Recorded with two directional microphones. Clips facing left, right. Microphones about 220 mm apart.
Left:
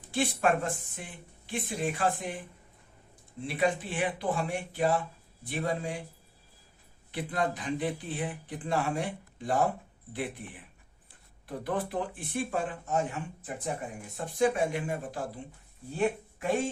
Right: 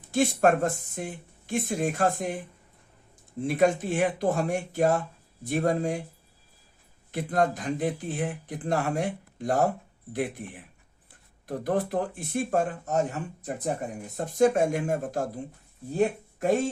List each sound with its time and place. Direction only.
0.1 s speech: 45° right (ahead or behind)
3.4 s speech: 45° right (ahead or behind)
7.1 s speech: 45° right (ahead or behind)